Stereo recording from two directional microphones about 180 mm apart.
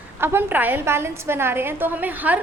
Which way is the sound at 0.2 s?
15° right (ahead or behind).